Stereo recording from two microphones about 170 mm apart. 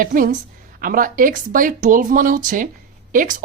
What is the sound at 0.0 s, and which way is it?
A woman's voice, 55° right (ahead or behind).